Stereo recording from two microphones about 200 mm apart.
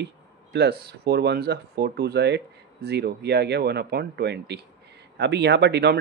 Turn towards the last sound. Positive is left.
turn(degrees=-55)  # may be behind; listen again after turning